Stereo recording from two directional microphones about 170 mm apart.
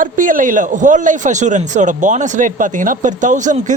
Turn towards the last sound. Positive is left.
turn(degrees=-45)  # may be behind; listen again after turning